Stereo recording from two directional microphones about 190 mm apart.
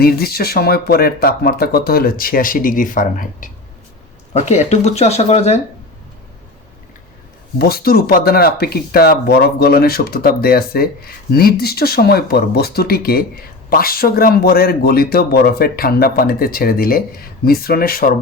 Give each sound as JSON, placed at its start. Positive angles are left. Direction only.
{"t": 0.0, "sound": "speech", "side_deg": 55}
{"t": 7.6, "sound": "speech", "side_deg": 55}